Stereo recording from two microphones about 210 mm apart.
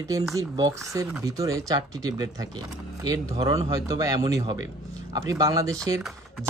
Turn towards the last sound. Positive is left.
turn(degrees=-15)  # may be behind; listen again after turning